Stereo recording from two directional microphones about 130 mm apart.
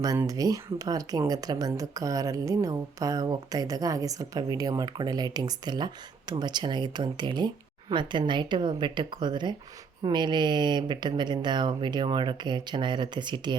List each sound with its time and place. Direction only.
0.0 s speech: 25° right (ahead or behind)